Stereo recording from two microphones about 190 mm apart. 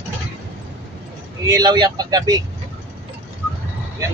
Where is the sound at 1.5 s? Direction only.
20° right (ahead or behind).